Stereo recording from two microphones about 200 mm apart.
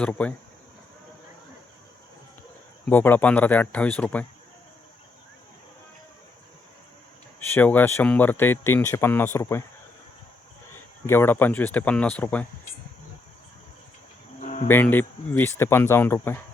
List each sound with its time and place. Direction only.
0.0 s speech: 5° left (ahead or behind)
2.9 s speech: 10° left (ahead or behind)
7.3 s speech: 10° left (ahead or behind)
11.0 s speech: 10° left (ahead or behind)
14.4 s cricket: 35° left (ahead or behind)
14.7 s speech: 10° left (ahead or behind)